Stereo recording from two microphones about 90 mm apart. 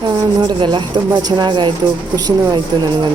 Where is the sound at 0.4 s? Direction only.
60° right (ahead or behind).